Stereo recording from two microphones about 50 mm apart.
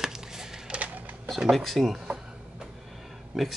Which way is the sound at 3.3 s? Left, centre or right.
Centre.